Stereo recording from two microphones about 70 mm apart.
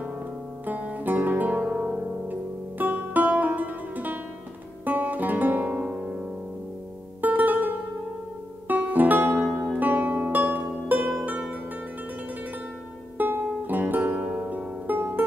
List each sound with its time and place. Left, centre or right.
0.7 s music: right
4.8 s guitar: right
7.2 s music: right
9.4 s music: centre
13.2 s music: right
14.2 s music: centre
14.5 s music: right
15.0 s music: right